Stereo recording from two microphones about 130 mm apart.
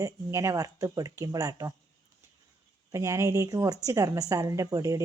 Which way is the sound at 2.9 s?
25° right (ahead or behind).